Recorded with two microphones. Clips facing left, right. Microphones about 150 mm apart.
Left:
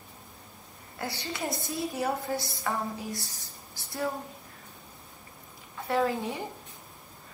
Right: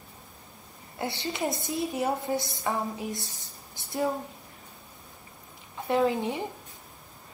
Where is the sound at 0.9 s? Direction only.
25° right (ahead or behind).